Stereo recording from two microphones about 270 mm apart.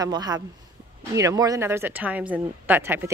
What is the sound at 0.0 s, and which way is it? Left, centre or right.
Speech, centre.